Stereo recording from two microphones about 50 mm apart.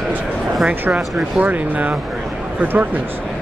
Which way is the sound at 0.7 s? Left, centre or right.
Right.